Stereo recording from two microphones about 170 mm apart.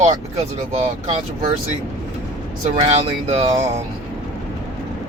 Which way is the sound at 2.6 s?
40° right (ahead or behind).